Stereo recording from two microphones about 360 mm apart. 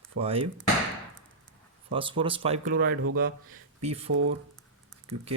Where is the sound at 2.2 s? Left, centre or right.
Centre.